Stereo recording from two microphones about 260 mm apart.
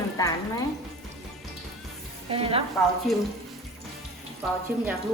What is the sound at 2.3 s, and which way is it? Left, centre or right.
Speech, right.